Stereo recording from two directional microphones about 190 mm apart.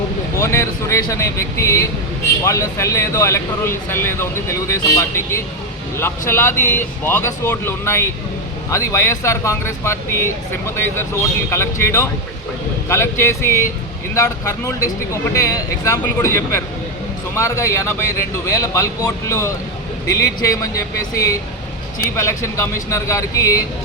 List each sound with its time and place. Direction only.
0.3 s speech: 15° left (ahead or behind)